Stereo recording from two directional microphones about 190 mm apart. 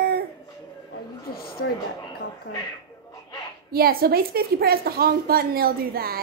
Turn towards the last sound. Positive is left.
turn(degrees=-50)  # may be behind; listen again after turning